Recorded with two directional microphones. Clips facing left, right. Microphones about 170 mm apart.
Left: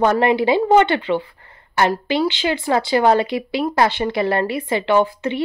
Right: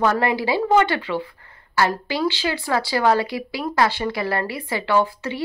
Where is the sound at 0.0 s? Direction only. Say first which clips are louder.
Left 4 dB; 20° left (ahead or behind).